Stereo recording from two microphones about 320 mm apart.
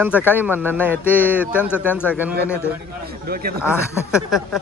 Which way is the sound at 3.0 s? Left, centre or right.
Right.